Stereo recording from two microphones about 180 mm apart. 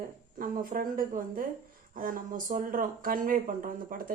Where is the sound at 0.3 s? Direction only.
50° right (ahead or behind).